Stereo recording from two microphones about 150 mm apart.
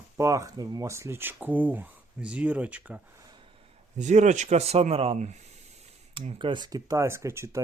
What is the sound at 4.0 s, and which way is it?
Speech, 50° right (ahead or behind).